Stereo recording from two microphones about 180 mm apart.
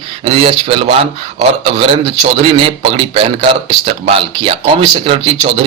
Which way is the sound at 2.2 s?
30° right (ahead or behind).